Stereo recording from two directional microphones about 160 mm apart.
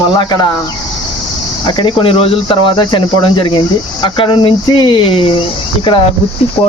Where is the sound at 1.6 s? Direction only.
30° left (ahead or behind).